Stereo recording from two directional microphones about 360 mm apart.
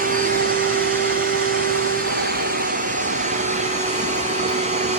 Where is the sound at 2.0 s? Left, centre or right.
Right.